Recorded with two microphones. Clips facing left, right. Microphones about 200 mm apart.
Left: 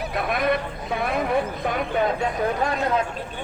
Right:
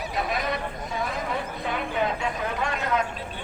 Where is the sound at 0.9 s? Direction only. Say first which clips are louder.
Left 5 dB; 65° left (ahead or behind).